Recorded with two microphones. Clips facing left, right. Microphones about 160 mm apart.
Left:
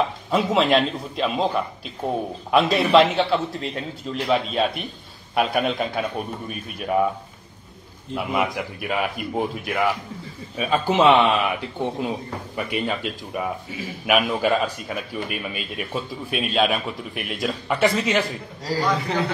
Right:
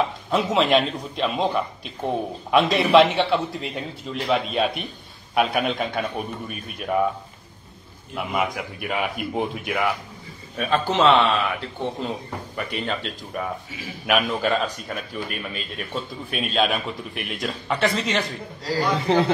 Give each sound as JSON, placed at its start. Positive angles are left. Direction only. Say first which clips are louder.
{"t": 0.3, "sound": "a man's voice", "louder": "left 1 dB", "side_deg": 0}
{"t": 8.2, "sound": "a man's voice", "louder": "left 1 dB", "side_deg": 0}
{"t": 19.0, "sound": "speech", "louder": "right 5 dB", "side_deg": -30}